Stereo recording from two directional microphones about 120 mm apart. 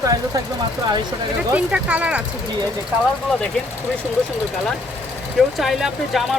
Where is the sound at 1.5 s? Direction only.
10° right (ahead or behind).